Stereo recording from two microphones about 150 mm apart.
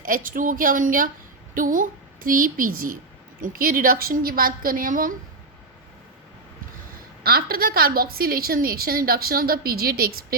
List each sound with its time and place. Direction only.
0.0 s a woman's voice: 65° right (ahead or behind)
7.2 s a woman's voice: 85° right